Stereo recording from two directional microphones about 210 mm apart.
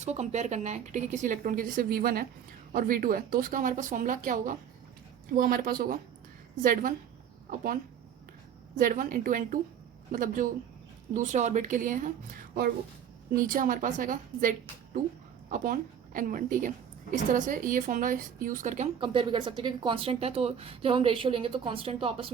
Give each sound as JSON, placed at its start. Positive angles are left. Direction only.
{"t": 0.0, "sound": "a woman's voice", "side_deg": -35}
{"t": 8.7, "sound": "speech", "side_deg": -40}
{"t": 13.3, "sound": "a woman's voice", "side_deg": -40}
{"t": 18.9, "sound": "speech", "side_deg": -25}